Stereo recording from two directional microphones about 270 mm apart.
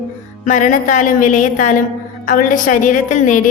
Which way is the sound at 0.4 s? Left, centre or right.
Left.